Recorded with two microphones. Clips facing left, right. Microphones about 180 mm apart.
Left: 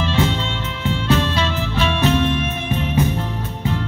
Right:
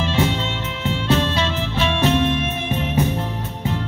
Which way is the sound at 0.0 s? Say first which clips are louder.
Even; 20° right (ahead or behind).